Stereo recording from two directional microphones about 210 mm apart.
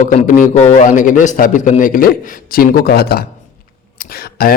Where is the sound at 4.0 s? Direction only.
45° left (ahead or behind).